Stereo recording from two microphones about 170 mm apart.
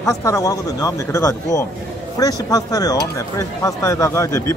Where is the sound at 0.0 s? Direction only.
20° left (ahead or behind).